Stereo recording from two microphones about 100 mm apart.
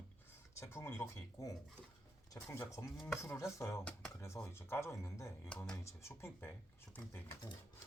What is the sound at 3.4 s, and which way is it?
Speech, 30° left (ahead or behind).